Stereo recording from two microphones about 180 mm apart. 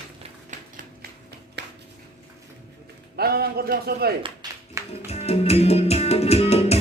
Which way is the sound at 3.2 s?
60° right (ahead or behind).